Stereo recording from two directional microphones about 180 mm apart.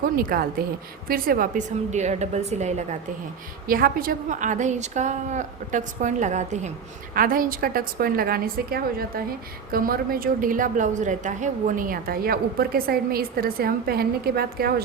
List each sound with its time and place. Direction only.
0.0 s a woman's voice: 55° right (ahead or behind)
3.7 s a woman's voice: 55° right (ahead or behind)
7.1 s a woman's voice: 50° right (ahead or behind)